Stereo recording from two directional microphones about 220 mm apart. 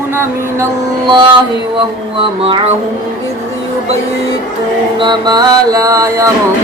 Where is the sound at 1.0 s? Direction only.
20° right (ahead or behind).